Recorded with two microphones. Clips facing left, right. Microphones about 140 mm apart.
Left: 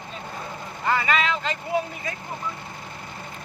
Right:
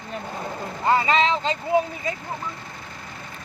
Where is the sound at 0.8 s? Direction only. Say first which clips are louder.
Right 4 dB; 30° right (ahead or behind).